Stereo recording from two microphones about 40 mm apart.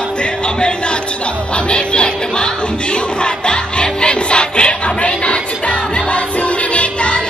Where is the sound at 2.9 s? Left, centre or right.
Left.